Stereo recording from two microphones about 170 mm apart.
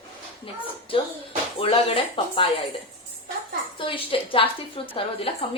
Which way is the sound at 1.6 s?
30° left (ahead or behind).